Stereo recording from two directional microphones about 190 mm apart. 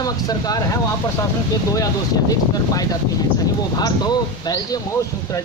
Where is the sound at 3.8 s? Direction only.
20° left (ahead or behind).